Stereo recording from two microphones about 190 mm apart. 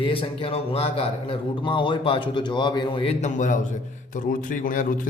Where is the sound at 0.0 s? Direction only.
30° left (ahead or behind).